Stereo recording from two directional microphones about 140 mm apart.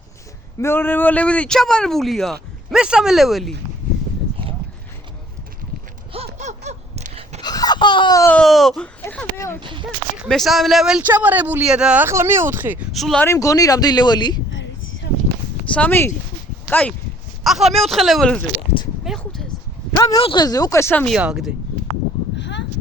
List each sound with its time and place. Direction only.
0.6 s speech: 15° left (ahead or behind); by 3.5 s centre (ahead or behind)
6.1 s laughter: 55° right (ahead or behind)
7.4 s a sound: 30° left (ahead or behind)
8.4 s speech: centre (ahead or behind)
9.6 s speech: 35° right (ahead or behind)
10.2 s speech: centre (ahead or behind); by 12.8 s 15° right (ahead or behind)
12.9 s speech: centre (ahead or behind)
13.2 s speech: 20° left (ahead or behind)
15.7 s speech: 10° left (ahead or behind)
17.4 s speech: centre (ahead or behind)
20.0 s speech: 25° left (ahead or behind)
21.2 s speech: 5° right (ahead or behind)